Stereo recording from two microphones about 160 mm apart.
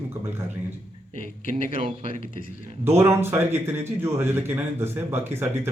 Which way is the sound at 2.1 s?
60° left (ahead or behind).